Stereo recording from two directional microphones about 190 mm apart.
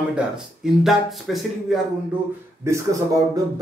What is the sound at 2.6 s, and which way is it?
Speech, 15° right (ahead or behind).